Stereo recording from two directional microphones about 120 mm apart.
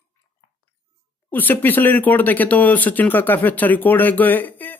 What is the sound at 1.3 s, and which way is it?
Speech, 15° left (ahead or behind).